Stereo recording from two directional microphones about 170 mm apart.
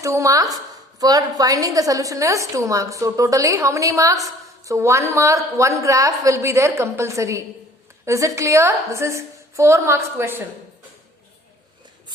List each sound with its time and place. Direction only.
0.0 s a woman's voice: 20° right (ahead or behind)